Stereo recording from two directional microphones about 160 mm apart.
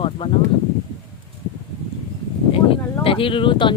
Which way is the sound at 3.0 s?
35° left (ahead or behind).